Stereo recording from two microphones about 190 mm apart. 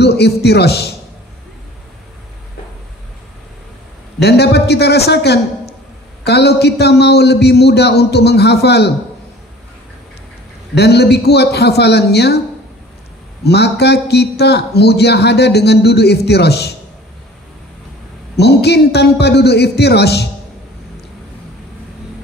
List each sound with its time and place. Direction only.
0.0 s a man's voice: 60° left (ahead or behind)
4.2 s a man's voice: 60° left (ahead or behind)
10.8 s a man's voice: 60° left (ahead or behind)
13.4 s a man's voice: 60° left (ahead or behind)
18.3 s a man's voice: 60° left (ahead or behind)